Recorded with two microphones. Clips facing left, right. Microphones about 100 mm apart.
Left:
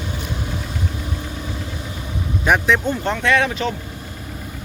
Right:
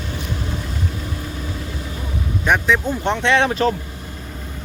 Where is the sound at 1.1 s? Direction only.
20° left (ahead or behind).